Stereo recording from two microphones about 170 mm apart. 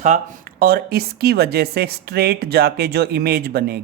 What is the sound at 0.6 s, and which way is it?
Speech, 65° right (ahead or behind).